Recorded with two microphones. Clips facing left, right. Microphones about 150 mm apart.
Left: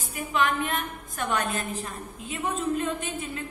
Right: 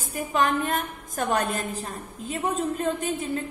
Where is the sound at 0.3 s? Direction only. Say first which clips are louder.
Right 2 dB; 40° right (ahead or behind).